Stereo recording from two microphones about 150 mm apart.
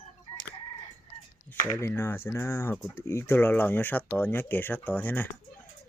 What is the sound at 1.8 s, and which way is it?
Speech, 15° left (ahead or behind).